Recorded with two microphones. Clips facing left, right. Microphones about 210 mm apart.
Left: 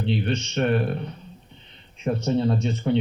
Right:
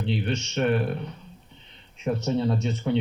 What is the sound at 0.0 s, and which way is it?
Speech, 5° right (ahead or behind).